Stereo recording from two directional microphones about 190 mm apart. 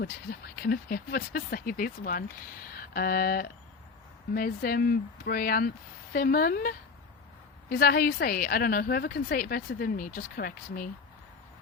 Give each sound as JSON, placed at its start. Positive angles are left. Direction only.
{"t": 0.0, "sound": "a woman's voice", "side_deg": 55}